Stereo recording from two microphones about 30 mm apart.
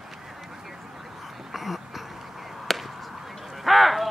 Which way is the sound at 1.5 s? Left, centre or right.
Centre.